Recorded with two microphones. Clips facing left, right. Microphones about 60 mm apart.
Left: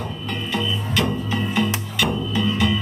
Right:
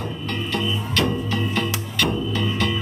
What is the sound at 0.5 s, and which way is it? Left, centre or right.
Music, centre.